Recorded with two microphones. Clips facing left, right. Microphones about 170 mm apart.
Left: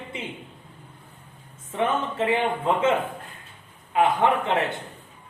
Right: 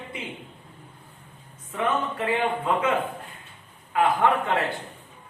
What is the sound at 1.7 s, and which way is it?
Speech, 25° left (ahead or behind).